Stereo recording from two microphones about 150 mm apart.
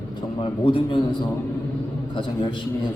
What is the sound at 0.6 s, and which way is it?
Speech, 35° left (ahead or behind).